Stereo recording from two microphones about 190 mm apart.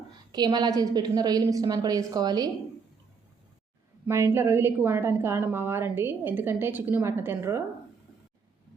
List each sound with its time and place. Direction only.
0.3 s a woman's voice: 20° right (ahead or behind)
4.0 s a woman's voice: 15° right (ahead or behind)